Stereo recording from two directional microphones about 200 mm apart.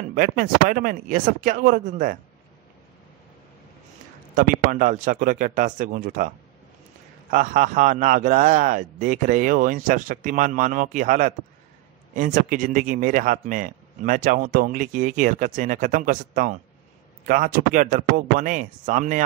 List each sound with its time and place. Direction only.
0.1 s speech: 45° right (ahead or behind)
4.4 s speech: 40° right (ahead or behind)